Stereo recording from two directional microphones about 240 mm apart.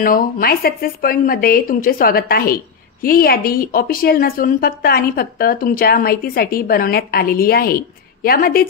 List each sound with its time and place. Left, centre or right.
0.0 s speech: left